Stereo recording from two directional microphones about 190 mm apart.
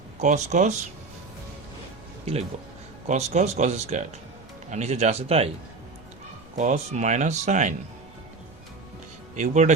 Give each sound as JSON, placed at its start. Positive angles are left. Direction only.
{"t": 0.2, "sound": "speech", "side_deg": -40}
{"t": 3.1, "sound": "speech", "side_deg": -35}
{"t": 6.6, "sound": "speech", "side_deg": -40}
{"t": 9.3, "sound": "speech", "side_deg": -40}